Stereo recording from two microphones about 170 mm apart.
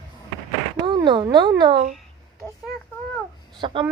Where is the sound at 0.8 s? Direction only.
30° right (ahead or behind).